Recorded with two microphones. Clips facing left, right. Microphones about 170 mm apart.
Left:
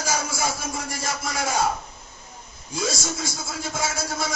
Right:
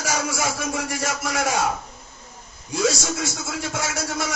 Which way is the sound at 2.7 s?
75° right (ahead or behind).